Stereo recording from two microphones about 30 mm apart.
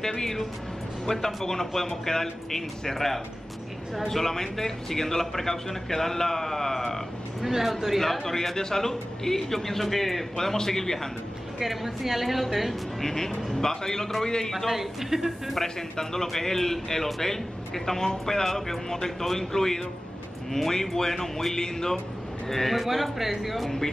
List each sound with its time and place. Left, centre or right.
0.0 s a man's voice: centre
7.4 s speech: centre
8.3 s a man's voice: centre
11.6 s a woman's voice: centre
13.0 s a man's voice: centre
14.7 s speech: centre
15.6 s a man's voice: centre
21.5 s speech: left
22.5 s a woman's voice: centre
23.1 s a woman's voice: centre